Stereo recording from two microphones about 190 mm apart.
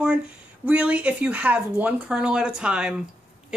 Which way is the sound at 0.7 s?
10° right (ahead or behind).